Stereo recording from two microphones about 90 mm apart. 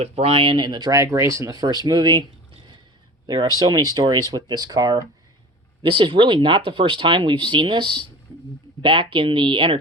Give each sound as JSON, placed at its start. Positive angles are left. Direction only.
{"t": 0.2, "sound": "speech", "side_deg": -90}
{"t": 3.6, "sound": "speech", "side_deg": -50}
{"t": 5.8, "sound": "speech", "side_deg": -70}